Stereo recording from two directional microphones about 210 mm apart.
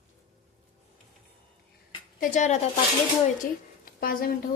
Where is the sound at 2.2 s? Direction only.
35° left (ahead or behind).